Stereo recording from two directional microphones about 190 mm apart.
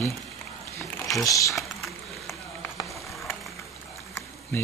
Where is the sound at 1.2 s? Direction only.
15° left (ahead or behind).